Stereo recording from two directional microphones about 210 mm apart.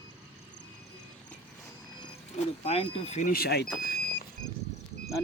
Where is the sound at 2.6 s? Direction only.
30° left (ahead or behind); by 3.7 s 50° left (ahead or behind).